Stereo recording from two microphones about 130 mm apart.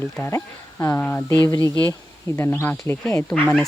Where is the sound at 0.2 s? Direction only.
20° left (ahead or behind).